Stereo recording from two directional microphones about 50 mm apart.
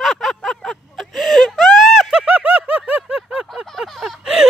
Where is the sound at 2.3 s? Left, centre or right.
Right.